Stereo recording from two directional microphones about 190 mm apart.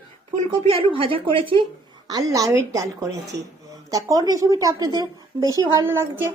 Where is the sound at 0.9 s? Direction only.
25° right (ahead or behind).